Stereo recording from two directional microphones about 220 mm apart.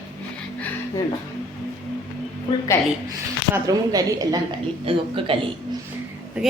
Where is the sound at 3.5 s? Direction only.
15° right (ahead or behind).